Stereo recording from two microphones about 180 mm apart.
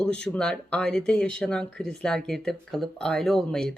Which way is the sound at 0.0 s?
5° left (ahead or behind).